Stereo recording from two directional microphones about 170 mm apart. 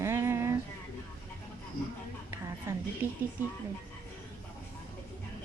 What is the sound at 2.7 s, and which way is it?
Speech, 15° right (ahead or behind).